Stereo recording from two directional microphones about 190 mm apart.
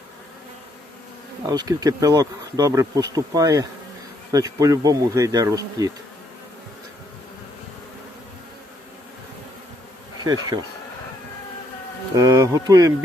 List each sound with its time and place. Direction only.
1.5 s bee: 20° right (ahead or behind)
10.2 s bee: 20° right (ahead or behind)
12.1 s speech: 15° right (ahead or behind)